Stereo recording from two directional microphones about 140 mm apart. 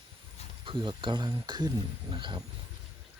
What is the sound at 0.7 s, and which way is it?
Speech, 35° right (ahead or behind).